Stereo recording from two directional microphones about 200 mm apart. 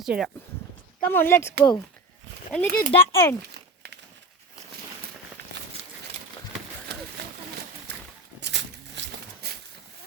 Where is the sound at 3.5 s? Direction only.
55° right (ahead or behind).